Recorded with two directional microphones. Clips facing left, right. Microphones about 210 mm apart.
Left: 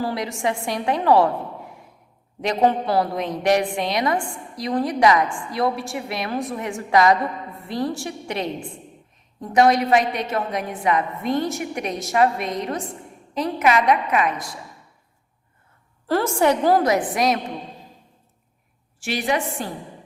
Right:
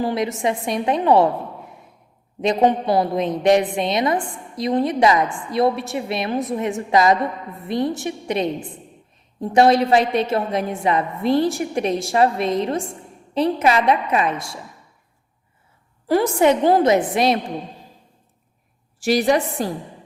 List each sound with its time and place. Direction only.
0.0 s a woman's voice: 20° right (ahead or behind)
16.0 s a woman's voice: 15° right (ahead or behind)
18.9 s a woman's voice: 40° right (ahead or behind)